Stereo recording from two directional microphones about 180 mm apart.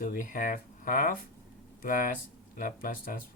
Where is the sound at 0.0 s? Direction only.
50° left (ahead or behind).